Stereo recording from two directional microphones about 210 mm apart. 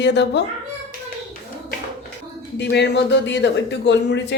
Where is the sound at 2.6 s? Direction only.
55° left (ahead or behind).